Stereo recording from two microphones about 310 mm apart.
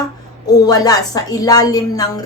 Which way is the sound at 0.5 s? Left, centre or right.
Centre.